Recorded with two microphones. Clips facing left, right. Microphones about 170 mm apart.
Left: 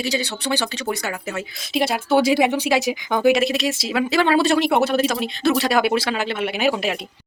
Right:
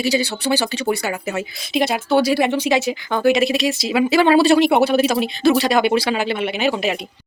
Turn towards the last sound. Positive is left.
turn(degrees=0)  # may be behind; listen again after turning